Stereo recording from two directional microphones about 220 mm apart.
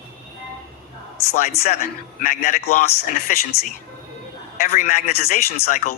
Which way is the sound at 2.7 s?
40° left (ahead or behind).